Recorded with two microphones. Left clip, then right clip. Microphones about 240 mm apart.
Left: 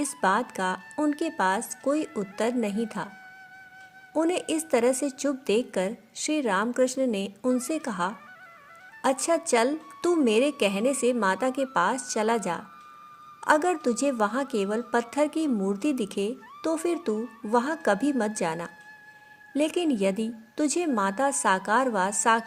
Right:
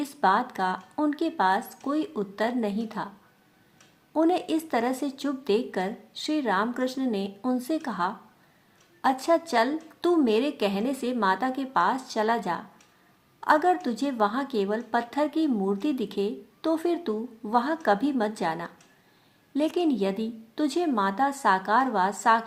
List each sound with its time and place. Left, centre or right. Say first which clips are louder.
0.2 s a woman's voice: right 2 dB; left
9.2 s a woman's voice: even; left